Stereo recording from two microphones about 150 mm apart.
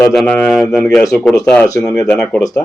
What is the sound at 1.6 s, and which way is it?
Speech, 25° left (ahead or behind).